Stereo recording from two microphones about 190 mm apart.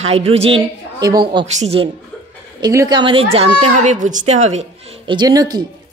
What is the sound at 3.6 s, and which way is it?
A child's voice, 40° right (ahead or behind).